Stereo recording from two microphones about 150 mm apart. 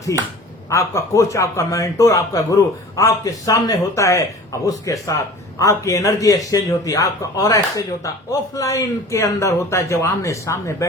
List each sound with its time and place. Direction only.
0.1 s a man's voice: 20° left (ahead or behind)